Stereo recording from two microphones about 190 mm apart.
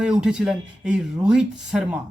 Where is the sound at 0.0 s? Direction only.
5° right (ahead or behind).